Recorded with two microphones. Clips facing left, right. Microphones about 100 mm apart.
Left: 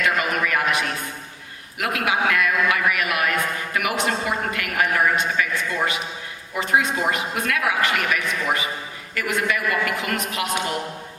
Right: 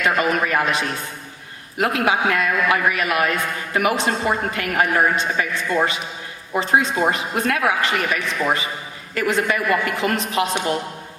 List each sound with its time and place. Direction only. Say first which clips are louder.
0.0 s a man's voice: right 3 dB; 30° right (ahead or behind)